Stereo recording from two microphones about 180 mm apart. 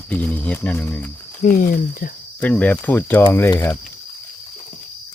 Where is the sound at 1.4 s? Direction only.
50° left (ahead or behind).